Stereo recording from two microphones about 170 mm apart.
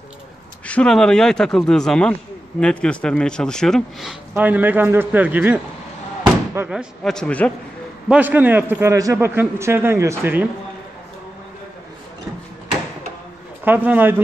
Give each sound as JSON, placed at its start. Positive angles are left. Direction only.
{"t": 0.7, "sound": "speech", "side_deg": 5}
{"t": 4.3, "sound": "a man's voice", "side_deg": -10}
{"t": 6.2, "sound": "slam", "side_deg": -15}
{"t": 7.0, "sound": "a man's voice", "side_deg": 5}
{"t": 8.1, "sound": "a man's voice", "side_deg": -10}
{"t": 13.7, "sound": "a man's voice", "side_deg": -10}